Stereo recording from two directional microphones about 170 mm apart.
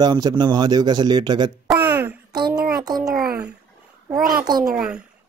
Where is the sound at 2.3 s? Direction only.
25° right (ahead or behind).